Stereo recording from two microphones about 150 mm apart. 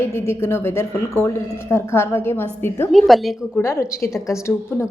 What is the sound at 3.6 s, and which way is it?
Speech, 15° left (ahead or behind).